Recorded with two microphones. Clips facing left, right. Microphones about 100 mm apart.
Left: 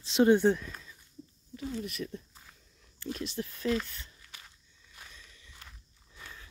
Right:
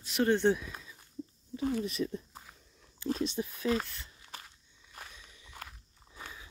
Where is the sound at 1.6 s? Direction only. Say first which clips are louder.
Right 5 dB; 50° right (ahead or behind).